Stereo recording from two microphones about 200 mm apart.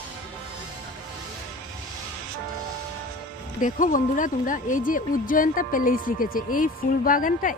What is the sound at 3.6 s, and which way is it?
Speech, 40° left (ahead or behind).